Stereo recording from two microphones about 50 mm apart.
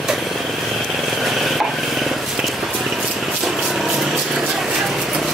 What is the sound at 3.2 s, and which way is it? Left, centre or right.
Vehicle, centre.